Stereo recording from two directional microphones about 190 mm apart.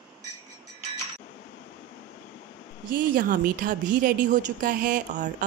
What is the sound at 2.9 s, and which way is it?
Speech, 45° right (ahead or behind).